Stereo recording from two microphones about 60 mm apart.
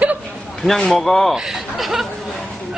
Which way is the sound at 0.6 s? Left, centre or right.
Centre.